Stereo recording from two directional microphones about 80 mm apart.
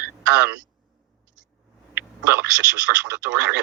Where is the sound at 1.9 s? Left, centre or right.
Right.